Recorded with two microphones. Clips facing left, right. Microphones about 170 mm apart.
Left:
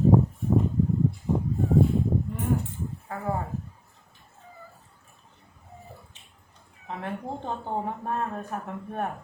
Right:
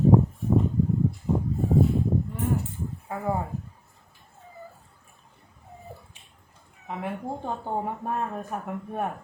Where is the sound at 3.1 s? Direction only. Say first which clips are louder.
Right 2 dB; 10° right (ahead or behind).